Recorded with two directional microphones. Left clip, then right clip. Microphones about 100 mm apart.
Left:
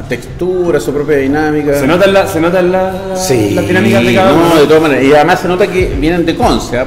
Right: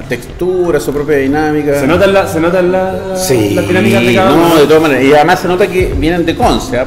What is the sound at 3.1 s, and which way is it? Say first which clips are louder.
A man's voice: right 1 dB; 10° right (ahead or behind).